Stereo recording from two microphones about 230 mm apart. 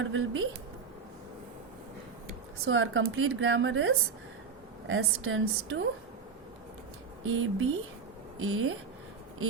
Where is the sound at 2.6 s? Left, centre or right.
Right.